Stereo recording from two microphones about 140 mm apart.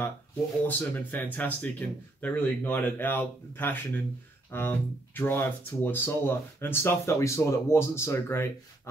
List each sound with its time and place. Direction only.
0.7 s speech: 15° left (ahead or behind)